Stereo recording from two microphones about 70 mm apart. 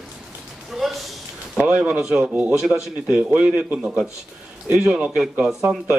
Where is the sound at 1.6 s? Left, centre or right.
Right.